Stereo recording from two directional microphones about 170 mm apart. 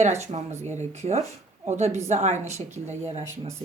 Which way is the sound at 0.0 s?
40° right (ahead or behind).